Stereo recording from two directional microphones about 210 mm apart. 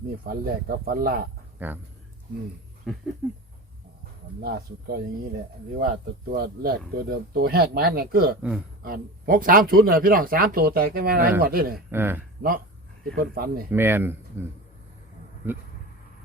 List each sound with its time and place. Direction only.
0.3 s speech: 45° right (ahead or behind)
1.5 s speech: 10° right (ahead or behind)
3.2 s a man's voice: 5° right (ahead or behind)
4.4 s speech: 45° right (ahead or behind)
8.4 s a man's voice: 5° right (ahead or behind)
8.8 s speech: 40° right (ahead or behind)
11.9 s speech: 10° right (ahead or behind)
12.4 s speech: 45° right (ahead or behind)
13.7 s speech: 10° right (ahead or behind)